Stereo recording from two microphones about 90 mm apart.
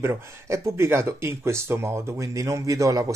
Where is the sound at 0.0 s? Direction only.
30° right (ahead or behind).